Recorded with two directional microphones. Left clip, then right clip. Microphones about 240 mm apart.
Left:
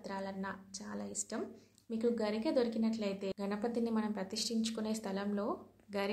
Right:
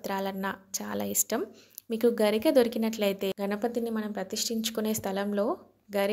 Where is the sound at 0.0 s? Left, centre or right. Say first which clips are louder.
Right 10 dB; right.